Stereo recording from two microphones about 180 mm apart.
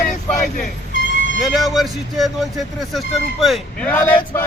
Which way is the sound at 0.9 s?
90° left.